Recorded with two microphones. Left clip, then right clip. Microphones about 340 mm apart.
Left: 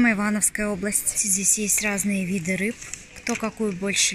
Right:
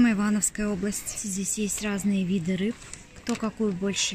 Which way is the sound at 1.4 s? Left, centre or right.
Right.